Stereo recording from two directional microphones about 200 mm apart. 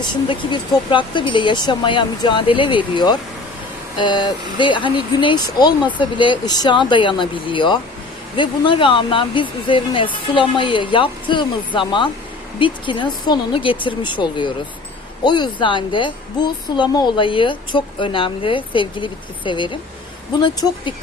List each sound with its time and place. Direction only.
0.0 s a woman's voice: 25° left (ahead or behind)